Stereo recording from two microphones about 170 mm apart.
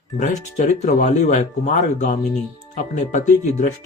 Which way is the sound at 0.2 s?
40° left (ahead or behind).